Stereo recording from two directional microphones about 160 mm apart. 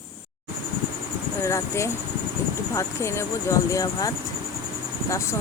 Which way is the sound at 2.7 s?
15° left (ahead or behind).